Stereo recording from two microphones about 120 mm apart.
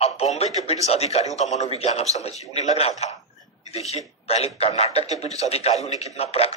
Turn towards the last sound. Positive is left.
turn(degrees=55)  # may be behind; listen again after turning